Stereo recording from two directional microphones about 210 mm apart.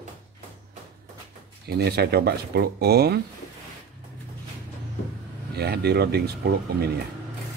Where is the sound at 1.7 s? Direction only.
50° right (ahead or behind).